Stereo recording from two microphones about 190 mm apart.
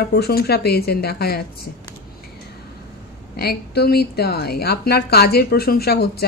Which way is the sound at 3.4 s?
55° left (ahead or behind).